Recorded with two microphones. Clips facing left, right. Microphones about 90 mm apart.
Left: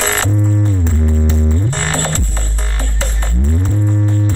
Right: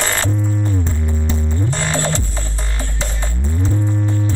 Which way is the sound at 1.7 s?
55° left (ahead or behind).